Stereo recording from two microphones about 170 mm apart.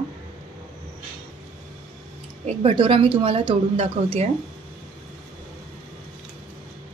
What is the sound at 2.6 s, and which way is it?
A woman's voice, 35° right (ahead or behind).